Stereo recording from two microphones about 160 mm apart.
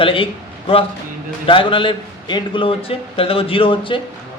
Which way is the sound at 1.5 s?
30° left (ahead or behind).